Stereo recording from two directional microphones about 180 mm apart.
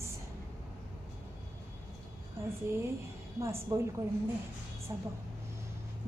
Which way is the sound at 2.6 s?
15° right (ahead or behind).